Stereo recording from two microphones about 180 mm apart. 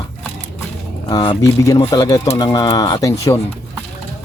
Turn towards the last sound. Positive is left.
turn(degrees=15)  # may be behind; listen again after turning